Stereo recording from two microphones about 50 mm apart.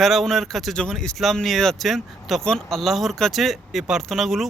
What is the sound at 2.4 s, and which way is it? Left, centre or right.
Speech, centre.